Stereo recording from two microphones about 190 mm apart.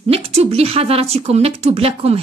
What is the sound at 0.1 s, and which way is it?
Speech, 35° right (ahead or behind).